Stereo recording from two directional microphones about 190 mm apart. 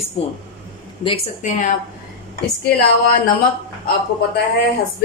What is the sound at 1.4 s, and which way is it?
Speech, 40° left (ahead or behind).